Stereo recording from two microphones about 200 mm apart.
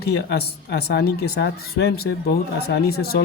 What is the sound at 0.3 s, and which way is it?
Speech, 55° left (ahead or behind).